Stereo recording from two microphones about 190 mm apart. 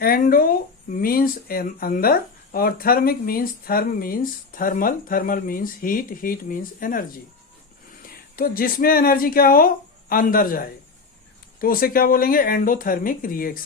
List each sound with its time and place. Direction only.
0.0 s speech: 50° left (ahead or behind)
8.4 s speech: 50° left (ahead or behind)